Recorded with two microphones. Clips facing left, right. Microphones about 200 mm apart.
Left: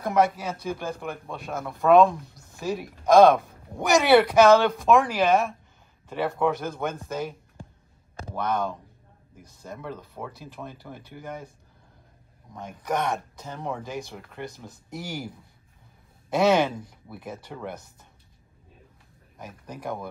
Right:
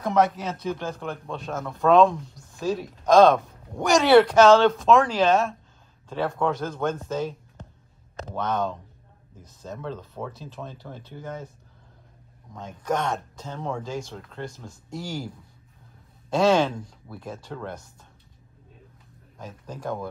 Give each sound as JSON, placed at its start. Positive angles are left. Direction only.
{"t": 0.0, "sound": "a woman's voice", "side_deg": 10}
{"t": 3.3, "sound": "speech", "side_deg": 0}
{"t": 4.0, "sound": "a woman's voice", "side_deg": 10}
{"t": 8.4, "sound": "a woman's voice", "side_deg": 10}
{"t": 12.5, "sound": "a woman's voice", "side_deg": 15}
{"t": 16.3, "sound": "a woman's voice", "side_deg": 15}
{"t": 19.3, "sound": "a woman's voice", "side_deg": 15}